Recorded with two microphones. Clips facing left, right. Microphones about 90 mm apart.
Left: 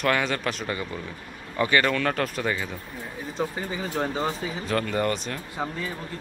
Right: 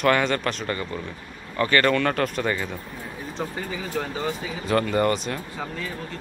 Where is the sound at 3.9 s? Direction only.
30° left (ahead or behind).